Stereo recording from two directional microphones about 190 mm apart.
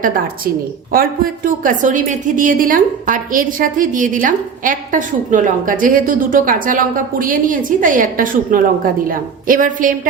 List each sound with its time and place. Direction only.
0.9 s a woman's voice: 45° right (ahead or behind)